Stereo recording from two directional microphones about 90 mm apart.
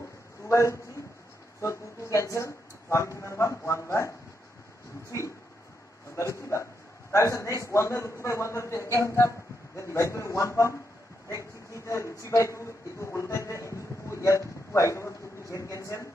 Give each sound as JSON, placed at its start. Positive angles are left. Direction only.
{"t": 0.5, "sound": "a man's voice", "side_deg": 35}
{"t": 6.1, "sound": "a man's voice", "side_deg": 35}